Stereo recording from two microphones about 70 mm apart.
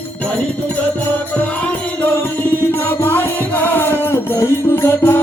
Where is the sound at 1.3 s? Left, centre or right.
Centre.